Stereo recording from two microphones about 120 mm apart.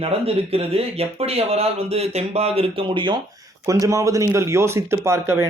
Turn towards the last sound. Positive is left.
turn(degrees=-20)  # may be behind; listen again after turning